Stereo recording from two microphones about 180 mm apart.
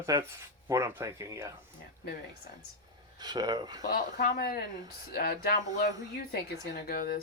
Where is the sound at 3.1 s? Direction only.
25° right (ahead or behind).